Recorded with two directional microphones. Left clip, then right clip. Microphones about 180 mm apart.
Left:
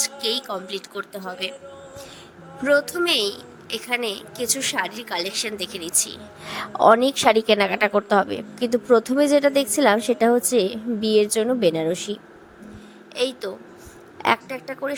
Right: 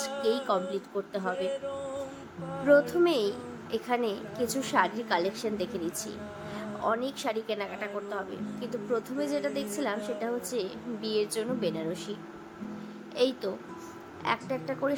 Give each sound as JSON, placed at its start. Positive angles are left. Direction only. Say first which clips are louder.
{"t": 0.0, "sound": "a sound", "louder": "left 4 dB", "side_deg": 55}
{"t": 1.1, "sound": "speech", "louder": "right 1 dB", "side_deg": 0}
{"t": 2.6, "sound": "a woman's voice", "louder": "left 3 dB", "side_deg": 50}
{"t": 13.1, "sound": "a woman's voice", "louder": "left 3 dB", "side_deg": 40}